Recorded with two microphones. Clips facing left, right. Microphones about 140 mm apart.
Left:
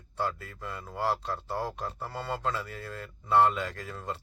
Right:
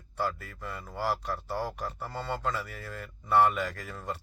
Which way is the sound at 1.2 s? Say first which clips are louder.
Even; 25° left (ahead or behind).